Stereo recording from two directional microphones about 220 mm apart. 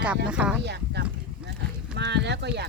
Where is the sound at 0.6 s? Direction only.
50° right (ahead or behind).